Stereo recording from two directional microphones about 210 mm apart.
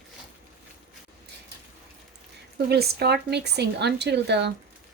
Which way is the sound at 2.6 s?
50° right (ahead or behind).